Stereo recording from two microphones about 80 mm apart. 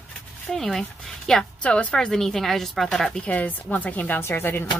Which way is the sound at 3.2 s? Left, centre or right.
Centre.